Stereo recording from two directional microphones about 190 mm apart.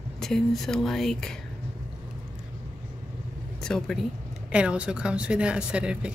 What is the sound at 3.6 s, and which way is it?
A woman's voice, centre (ahead or behind).